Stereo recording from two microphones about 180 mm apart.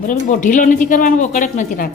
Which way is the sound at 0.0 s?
45° left (ahead or behind).